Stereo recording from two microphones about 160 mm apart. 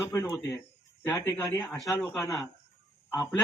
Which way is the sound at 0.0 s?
15° left (ahead or behind).